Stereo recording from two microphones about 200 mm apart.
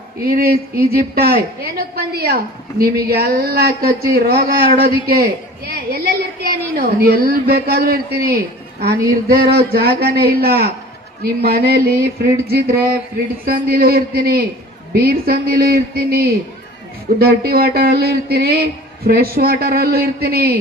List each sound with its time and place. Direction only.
0.3 s a woman's voice: 50° right (ahead or behind)